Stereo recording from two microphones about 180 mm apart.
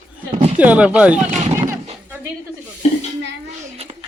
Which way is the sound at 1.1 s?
40° right (ahead or behind).